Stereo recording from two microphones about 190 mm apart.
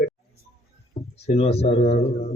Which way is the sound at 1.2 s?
35° left (ahead or behind).